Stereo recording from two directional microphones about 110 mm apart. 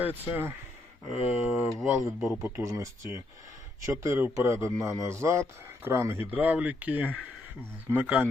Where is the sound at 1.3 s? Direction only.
15° right (ahead or behind).